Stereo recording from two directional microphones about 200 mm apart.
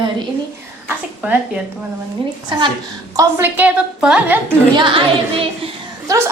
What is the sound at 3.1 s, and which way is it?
Speech, 10° right (ahead or behind).